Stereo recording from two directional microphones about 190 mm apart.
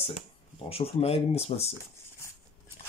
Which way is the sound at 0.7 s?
30° left (ahead or behind).